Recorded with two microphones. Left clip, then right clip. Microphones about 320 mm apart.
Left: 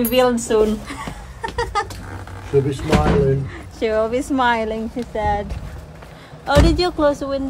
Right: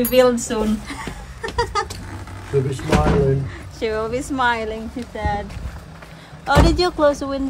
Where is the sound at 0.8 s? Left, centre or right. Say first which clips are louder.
Even; centre.